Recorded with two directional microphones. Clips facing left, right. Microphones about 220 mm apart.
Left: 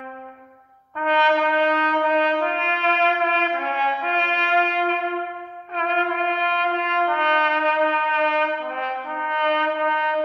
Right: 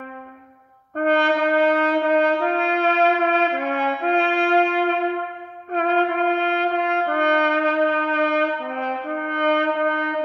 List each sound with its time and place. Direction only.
0.9 s brass instrument: 50° right (ahead or behind)